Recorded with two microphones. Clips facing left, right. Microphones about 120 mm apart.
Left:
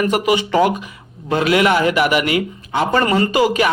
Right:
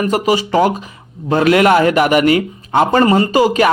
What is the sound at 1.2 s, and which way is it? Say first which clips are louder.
A man's voice: right 4 dB; 45° right (ahead or behind).